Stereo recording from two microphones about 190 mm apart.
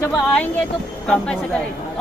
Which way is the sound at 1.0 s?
5° left (ahead or behind).